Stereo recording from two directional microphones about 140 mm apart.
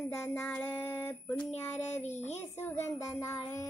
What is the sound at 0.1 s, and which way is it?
Child singing, 15° left (ahead or behind).